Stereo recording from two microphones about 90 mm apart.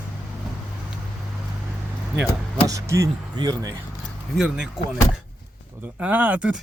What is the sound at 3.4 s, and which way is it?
Speech, 45° right (ahead or behind).